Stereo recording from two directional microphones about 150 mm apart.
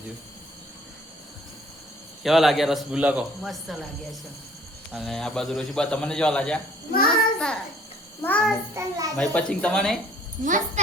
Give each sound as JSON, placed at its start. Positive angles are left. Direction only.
{"t": 2.2, "sound": "a man's voice", "side_deg": 0}
{"t": 8.7, "sound": "a child's voice", "side_deg": -25}
{"t": 9.1, "sound": "a man's voice", "side_deg": 5}